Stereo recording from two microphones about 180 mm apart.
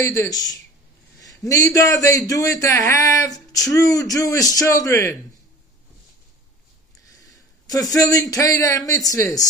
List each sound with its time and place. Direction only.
0.0 s a man's voice: 15° left (ahead or behind)
7.1 s a man's voice: 20° left (ahead or behind)